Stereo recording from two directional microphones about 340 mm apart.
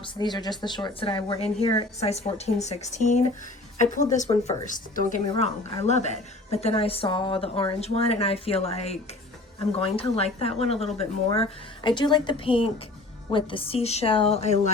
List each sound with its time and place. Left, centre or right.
0.0 s a woman's voice: centre